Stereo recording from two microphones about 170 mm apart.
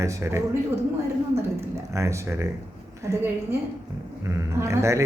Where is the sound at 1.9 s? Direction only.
15° right (ahead or behind).